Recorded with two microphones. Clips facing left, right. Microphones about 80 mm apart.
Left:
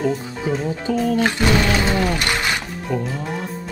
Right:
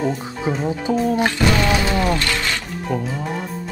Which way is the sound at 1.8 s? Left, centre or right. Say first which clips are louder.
Even; left.